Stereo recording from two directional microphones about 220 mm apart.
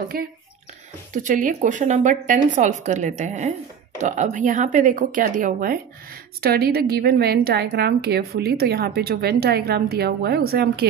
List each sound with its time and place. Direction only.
0.1 s a woman's voice: 40° right (ahead or behind)